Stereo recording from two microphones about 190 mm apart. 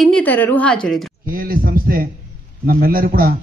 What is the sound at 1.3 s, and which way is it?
A man's voice, 50° right (ahead or behind).